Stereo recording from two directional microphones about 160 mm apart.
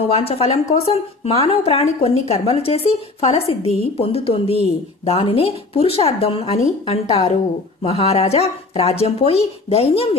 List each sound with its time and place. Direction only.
0.0 s a woman's voice: 35° left (ahead or behind)